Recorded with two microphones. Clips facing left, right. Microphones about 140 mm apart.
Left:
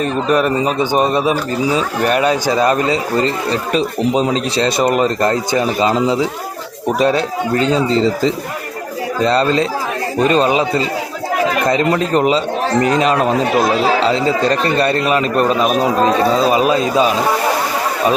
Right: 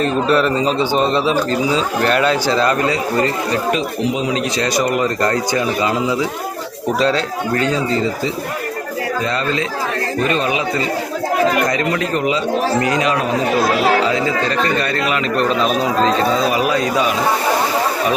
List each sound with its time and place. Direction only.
0.0 s speech: 10° left (ahead or behind)
7.0 s speech: 20° left (ahead or behind)
9.2 s a man's voice: 35° left (ahead or behind)
14.1 s a man's voice: 35° left (ahead or behind)
16.0 s speech: 15° left (ahead or behind)